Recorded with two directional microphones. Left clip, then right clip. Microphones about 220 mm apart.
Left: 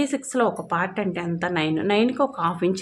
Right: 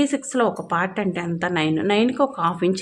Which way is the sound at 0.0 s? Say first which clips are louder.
Right 2 dB; 10° right (ahead or behind).